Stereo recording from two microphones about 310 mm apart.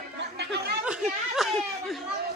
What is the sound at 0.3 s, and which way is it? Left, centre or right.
Snicker, right.